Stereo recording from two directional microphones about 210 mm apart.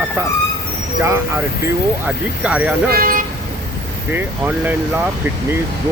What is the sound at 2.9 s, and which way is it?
Speech, 40° right (ahead or behind).